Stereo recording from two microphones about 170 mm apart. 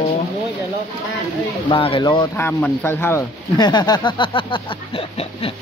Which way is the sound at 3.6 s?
25° left (ahead or behind).